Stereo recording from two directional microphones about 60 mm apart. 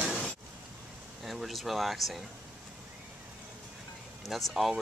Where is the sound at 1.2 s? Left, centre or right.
Centre.